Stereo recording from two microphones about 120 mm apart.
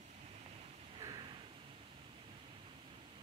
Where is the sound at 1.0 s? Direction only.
35° right (ahead or behind).